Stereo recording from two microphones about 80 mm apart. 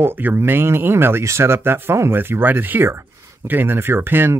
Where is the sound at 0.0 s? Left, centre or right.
Right.